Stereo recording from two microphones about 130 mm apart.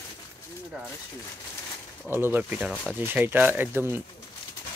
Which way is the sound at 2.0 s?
15° right (ahead or behind).